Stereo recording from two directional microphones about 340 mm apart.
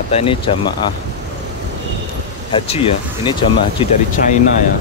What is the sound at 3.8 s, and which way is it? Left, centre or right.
Speech, centre.